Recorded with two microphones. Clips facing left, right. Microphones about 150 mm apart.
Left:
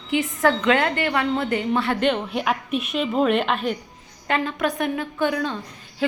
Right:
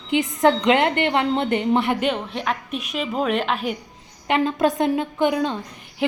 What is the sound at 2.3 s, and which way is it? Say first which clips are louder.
A woman's voice: left 2 dB; 5° left (ahead or behind).